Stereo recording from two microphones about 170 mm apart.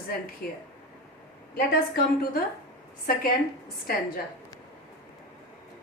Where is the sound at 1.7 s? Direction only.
65° left (ahead or behind).